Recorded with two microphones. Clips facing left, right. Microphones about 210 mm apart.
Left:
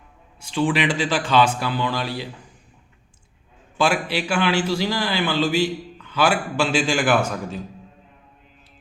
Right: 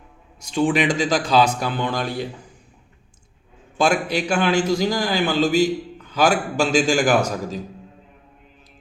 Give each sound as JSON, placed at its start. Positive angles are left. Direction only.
{"t": 0.3, "sound": "a man's voice", "side_deg": -40}
{"t": 3.8, "sound": "a man's voice", "side_deg": -40}